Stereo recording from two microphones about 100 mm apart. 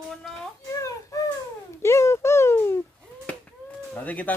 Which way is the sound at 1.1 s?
35° left (ahead or behind).